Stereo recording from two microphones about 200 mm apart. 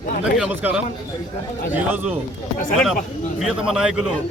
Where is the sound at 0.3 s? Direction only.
5° right (ahead or behind).